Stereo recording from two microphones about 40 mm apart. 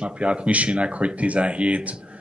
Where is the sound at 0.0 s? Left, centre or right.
Right.